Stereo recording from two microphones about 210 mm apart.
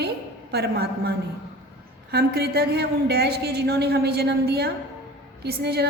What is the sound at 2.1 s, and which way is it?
A woman's voice, 50° right (ahead or behind).